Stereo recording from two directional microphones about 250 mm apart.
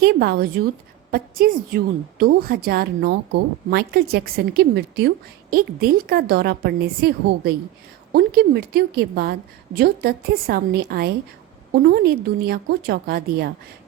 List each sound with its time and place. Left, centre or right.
0.0 s a woman's voice: right